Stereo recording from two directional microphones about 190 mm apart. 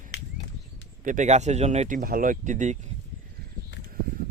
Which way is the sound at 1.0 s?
40° right (ahead or behind).